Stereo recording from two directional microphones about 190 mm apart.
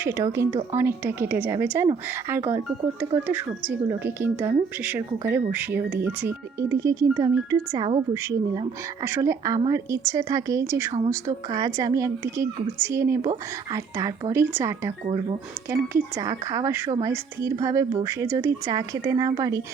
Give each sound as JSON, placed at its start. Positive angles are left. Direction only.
{"t": 0.0, "sound": "speech", "side_deg": -15}